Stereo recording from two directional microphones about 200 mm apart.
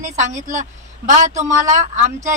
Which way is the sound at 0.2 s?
35° right (ahead or behind).